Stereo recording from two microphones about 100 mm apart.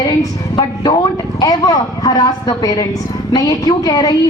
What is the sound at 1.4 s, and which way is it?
A woman's voice, 40° left (ahead or behind).